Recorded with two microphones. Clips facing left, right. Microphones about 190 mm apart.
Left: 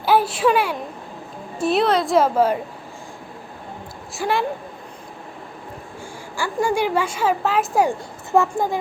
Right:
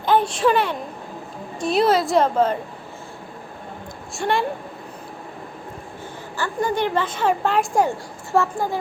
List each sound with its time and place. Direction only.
0.0 s a woman's voice: 5° left (ahead or behind)
4.2 s a woman's voice: centre (ahead or behind)
6.3 s a woman's voice: 10° left (ahead or behind)
7.9 s a woman's voice: 15° left (ahead or behind)